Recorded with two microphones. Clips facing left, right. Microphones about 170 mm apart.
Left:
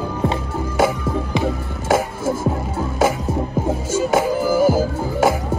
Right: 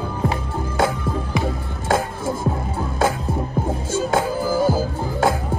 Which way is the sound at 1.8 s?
5° left (ahead or behind).